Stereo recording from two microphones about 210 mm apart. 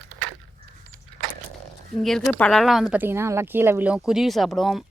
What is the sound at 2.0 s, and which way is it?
Speech, centre (ahead or behind).